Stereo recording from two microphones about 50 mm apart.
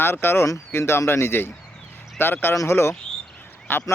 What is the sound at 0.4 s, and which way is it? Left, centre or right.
Speech, left.